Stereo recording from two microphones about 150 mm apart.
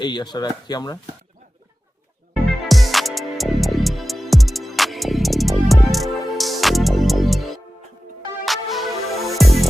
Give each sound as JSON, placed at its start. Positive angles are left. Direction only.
{"t": 0.0, "sound": "speech", "side_deg": 30}
{"t": 2.6, "sound": "music", "side_deg": 0}